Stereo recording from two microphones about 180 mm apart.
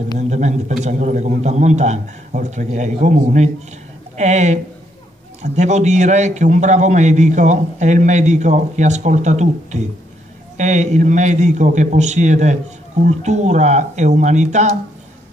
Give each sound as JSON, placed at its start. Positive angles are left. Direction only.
{"t": 0.2, "sound": "a man's voice", "side_deg": -40}